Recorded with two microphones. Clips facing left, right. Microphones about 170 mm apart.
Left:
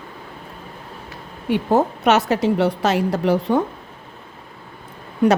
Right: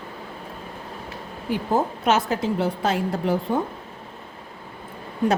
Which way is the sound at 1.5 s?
70° left (ahead or behind).